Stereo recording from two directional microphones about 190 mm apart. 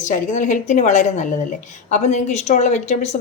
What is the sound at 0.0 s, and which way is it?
A woman's voice, 40° left (ahead or behind).